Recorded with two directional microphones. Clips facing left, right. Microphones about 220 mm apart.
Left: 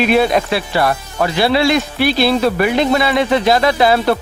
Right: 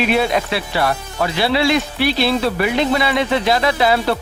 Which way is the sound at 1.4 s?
45° left (ahead or behind).